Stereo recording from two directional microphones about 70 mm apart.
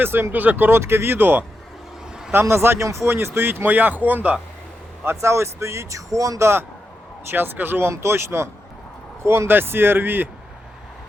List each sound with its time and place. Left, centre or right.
0.0 s speech: right
3.1 s speech: right
5.0 s speech: right
7.3 s speech: right